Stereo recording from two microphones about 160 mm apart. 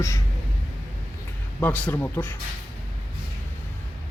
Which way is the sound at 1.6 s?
10° left (ahead or behind).